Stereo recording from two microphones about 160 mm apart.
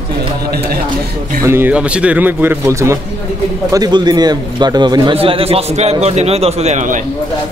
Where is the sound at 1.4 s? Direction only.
15° right (ahead or behind); by 7.1 s 50° right (ahead or behind).